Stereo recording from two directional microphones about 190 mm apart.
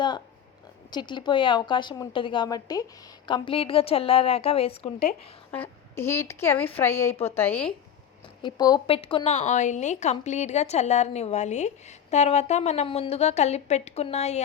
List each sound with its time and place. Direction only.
0.9 s a woman's voice: 25° left (ahead or behind)
5.5 s a woman's voice: 10° left (ahead or behind)
8.4 s a woman's voice: 25° left (ahead or behind)